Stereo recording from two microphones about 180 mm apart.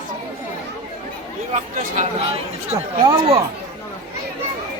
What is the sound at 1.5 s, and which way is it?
Speech, 35° right (ahead or behind).